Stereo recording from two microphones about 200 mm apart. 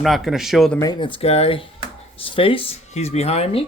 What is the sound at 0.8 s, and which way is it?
Speech, 20° left (ahead or behind).